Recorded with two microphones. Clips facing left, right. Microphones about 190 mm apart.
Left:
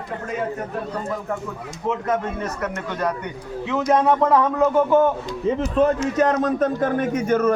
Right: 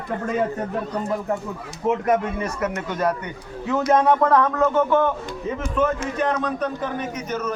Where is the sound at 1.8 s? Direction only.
15° right (ahead or behind); by 5.1 s 15° left (ahead or behind).